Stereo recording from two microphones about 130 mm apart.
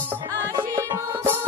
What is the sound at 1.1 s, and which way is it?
Music, 20° right (ahead or behind).